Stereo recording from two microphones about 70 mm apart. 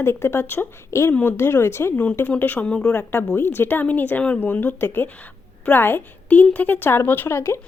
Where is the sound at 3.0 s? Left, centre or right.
Left.